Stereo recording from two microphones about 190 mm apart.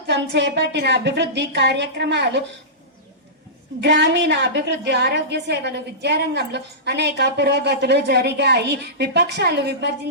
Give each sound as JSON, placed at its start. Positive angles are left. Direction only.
{"t": 0.1, "sound": "a woman's voice", "side_deg": -65}
{"t": 3.8, "sound": "a woman's voice", "side_deg": -65}